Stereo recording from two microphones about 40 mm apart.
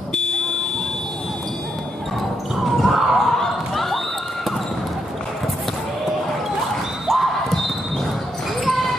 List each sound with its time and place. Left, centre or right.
0.1 s buzzer: left
2.6 s basketball bounce: centre
3.3 s a sound: centre
7.1 s horse: centre